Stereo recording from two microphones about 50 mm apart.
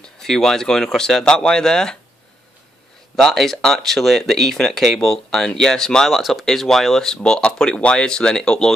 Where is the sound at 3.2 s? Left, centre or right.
Centre.